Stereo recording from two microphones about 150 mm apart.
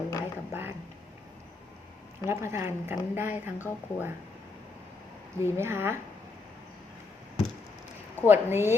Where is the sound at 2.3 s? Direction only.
20° right (ahead or behind).